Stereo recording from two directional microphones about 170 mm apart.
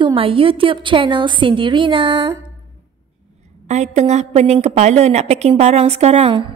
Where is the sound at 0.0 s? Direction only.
30° right (ahead or behind).